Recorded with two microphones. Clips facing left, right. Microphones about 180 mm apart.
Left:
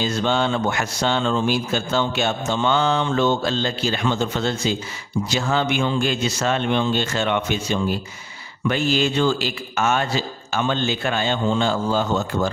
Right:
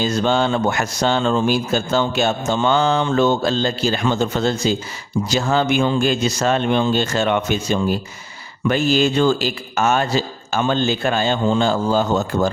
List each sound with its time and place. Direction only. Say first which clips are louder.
0.0 s speech: right 3 dB; 40° right (ahead or behind)